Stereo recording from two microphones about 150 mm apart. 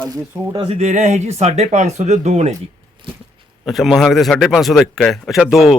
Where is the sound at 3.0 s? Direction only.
35° right (ahead or behind).